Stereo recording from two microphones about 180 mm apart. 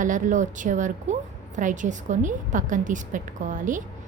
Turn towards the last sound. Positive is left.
turn(degrees=-45)  # may be behind; listen again after turning